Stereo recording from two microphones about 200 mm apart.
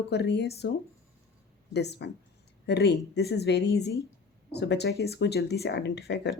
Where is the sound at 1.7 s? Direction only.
55° left (ahead or behind).